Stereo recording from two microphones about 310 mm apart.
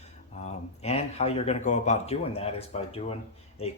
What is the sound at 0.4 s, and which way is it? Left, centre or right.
Speech, left.